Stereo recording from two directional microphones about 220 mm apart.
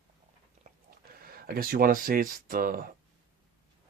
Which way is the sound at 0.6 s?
45° right (ahead or behind).